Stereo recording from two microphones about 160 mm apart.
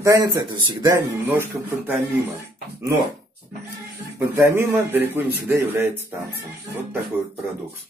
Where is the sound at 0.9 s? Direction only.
15° right (ahead or behind).